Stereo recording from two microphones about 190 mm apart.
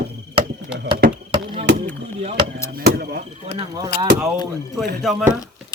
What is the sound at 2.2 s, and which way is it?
Speech, 35° right (ahead or behind).